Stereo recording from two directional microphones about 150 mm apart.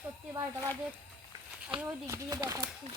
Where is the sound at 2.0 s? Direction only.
20° right (ahead or behind).